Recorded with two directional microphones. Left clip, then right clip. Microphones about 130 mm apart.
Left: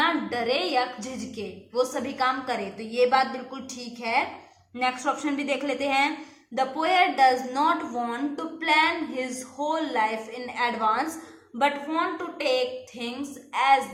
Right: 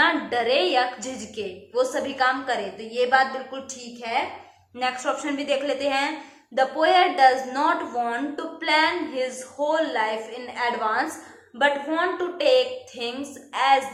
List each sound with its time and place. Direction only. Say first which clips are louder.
0.0 s a woman's voice: right 4 dB; 30° left (ahead or behind)
4.8 s a woman's voice: right 1 dB; 30° left (ahead or behind)